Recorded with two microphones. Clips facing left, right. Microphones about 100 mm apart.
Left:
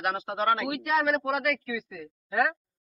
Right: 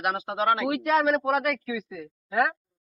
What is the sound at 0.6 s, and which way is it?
Speech, 35° right (ahead or behind).